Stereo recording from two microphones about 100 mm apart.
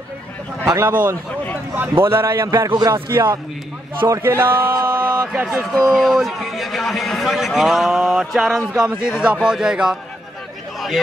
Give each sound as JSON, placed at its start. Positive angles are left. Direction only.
{"t": 0.7, "sound": "a man's voice", "side_deg": -25}
{"t": 2.7, "sound": "speech", "side_deg": -45}
{"t": 4.2, "sound": "a man's voice", "side_deg": -20}